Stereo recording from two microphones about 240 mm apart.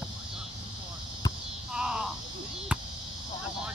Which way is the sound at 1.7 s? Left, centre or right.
Centre.